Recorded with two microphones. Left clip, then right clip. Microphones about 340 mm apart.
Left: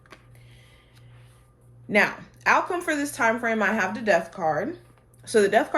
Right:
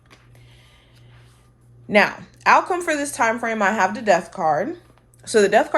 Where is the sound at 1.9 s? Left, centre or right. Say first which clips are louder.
Right 5 dB; right.